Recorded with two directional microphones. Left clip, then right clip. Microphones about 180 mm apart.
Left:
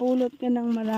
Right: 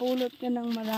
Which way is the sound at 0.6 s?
Centre (ahead or behind).